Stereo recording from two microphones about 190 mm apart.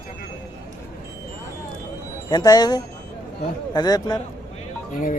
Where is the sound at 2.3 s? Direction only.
20° left (ahead or behind).